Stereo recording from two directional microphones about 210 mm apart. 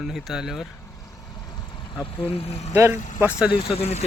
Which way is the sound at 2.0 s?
30° left (ahead or behind).